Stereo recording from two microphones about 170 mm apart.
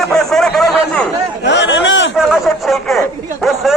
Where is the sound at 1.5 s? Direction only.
90° left.